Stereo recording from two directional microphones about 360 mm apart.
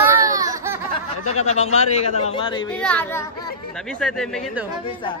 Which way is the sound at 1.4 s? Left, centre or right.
Centre.